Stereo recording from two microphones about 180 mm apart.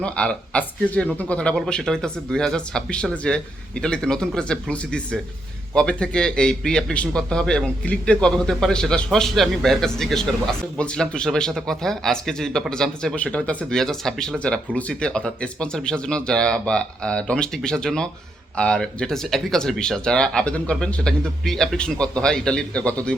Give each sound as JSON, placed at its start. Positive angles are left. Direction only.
{"t": 0.0, "sound": "a man's voice", "side_deg": 5}